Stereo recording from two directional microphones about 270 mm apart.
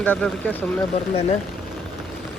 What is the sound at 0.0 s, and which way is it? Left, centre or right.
Speech, centre.